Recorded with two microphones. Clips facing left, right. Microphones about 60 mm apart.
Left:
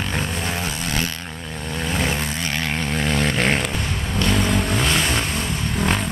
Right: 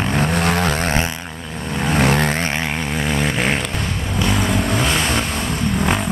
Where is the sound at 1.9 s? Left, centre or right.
Right.